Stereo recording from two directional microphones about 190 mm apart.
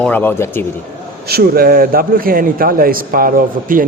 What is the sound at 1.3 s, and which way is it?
A man's voice, 55° right (ahead or behind).